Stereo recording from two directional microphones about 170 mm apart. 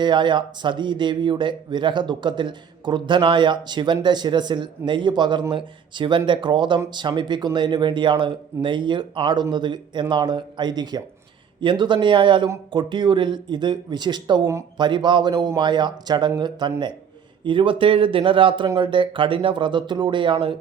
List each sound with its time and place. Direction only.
0.0 s speech: 25° right (ahead or behind)